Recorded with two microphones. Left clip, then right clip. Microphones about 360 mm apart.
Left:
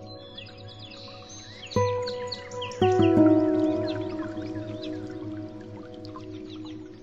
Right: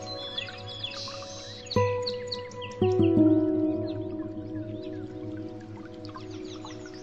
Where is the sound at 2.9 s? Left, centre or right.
Left.